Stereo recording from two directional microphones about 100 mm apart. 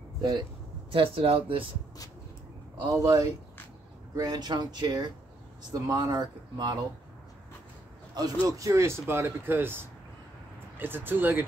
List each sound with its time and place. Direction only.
0.2 s speech: 45° right (ahead or behind)
0.9 s speech: 65° right (ahead or behind)
2.9 s speech: 35° right (ahead or behind)
8.5 s speech: 30° right (ahead or behind)